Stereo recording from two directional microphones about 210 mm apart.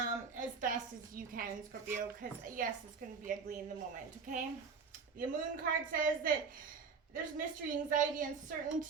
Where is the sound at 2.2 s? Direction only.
40° right (ahead or behind).